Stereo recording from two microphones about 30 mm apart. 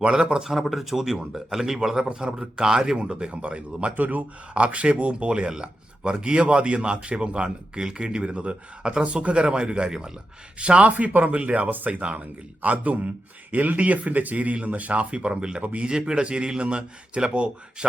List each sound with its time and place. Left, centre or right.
0.3 s a man's voice: right
0.7 s a man's voice: centre; by 3.0 s right
3.0 s a man's voice: right
3.9 s speech: right
4.5 s a man's voice: right
5.5 s a man's voice: right
7.8 s speech: right
8.0 s a man's voice: right
10.6 s a man's voice: right
10.9 s speech: right
12.6 s speech: right
13.5 s speech: right
15.1 s a man's voice: right